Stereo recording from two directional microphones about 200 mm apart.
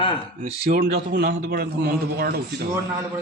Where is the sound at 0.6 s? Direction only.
50° right (ahead or behind).